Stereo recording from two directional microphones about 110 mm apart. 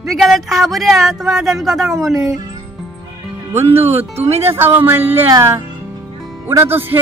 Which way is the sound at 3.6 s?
65° right (ahead or behind).